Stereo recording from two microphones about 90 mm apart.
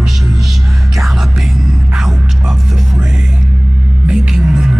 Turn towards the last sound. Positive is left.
turn(degrees=-10)  # may be behind; listen again after turning